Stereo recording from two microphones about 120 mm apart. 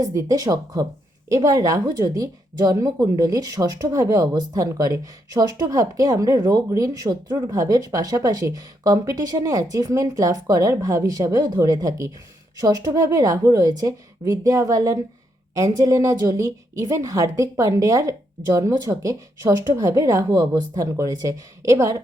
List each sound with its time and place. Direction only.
0.0 s a woman's voice: 30° right (ahead or behind)